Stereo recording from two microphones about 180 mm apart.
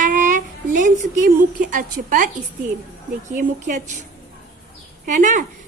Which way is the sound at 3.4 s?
45° right (ahead or behind).